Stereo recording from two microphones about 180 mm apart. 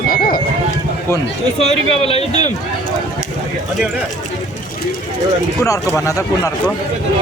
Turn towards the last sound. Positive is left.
turn(degrees=15)  # may be behind; listen again after turning